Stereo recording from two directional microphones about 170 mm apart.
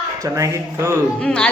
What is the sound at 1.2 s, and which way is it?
Speech, 5° left (ahead or behind).